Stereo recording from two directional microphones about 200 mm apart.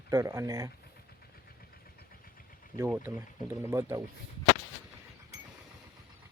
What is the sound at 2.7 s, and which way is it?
Speech, 10° right (ahead or behind).